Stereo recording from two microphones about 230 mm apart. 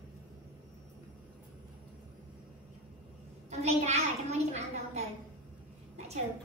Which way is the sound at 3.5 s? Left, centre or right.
Right.